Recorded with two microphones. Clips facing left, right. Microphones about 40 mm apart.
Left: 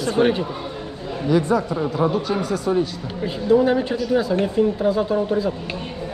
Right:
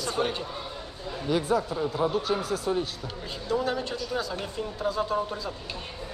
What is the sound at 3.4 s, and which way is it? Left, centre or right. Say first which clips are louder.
Speech: left 11 dB; left.